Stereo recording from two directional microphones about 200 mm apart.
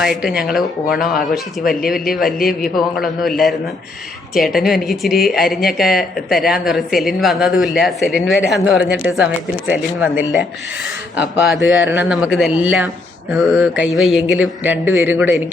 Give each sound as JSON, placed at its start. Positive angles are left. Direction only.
{"t": 0.0, "sound": "speech", "side_deg": 0}
{"t": 1.6, "sound": "speech", "side_deg": 45}
{"t": 2.1, "sound": "speech", "side_deg": 0}
{"t": 4.4, "sound": "speech", "side_deg": 0}
{"t": 11.4, "sound": "speech", "side_deg": 0}